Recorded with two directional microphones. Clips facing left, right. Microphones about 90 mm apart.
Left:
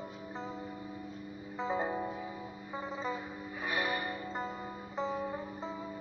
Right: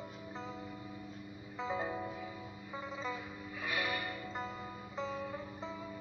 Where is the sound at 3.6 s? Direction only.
35° left (ahead or behind).